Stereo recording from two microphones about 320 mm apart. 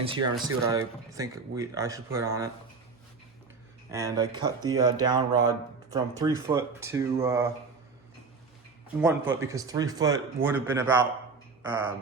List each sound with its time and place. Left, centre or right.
0.4 s speech: centre
3.9 s speech: centre
9.0 s speech: centre